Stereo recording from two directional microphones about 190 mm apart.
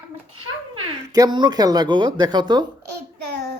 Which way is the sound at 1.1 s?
20° right (ahead or behind).